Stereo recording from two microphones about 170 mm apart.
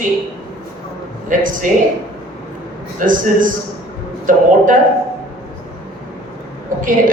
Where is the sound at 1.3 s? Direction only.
50° right (ahead or behind).